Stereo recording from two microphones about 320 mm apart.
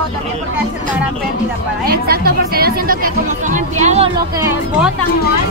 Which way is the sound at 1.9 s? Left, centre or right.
Right.